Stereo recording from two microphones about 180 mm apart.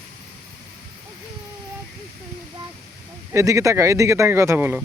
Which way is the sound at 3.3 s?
15° right (ahead or behind).